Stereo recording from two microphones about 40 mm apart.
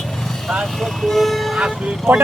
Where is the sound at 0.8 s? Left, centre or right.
Centre.